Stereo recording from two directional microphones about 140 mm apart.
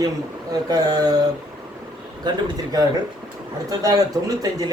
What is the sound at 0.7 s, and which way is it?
Speech, 30° right (ahead or behind).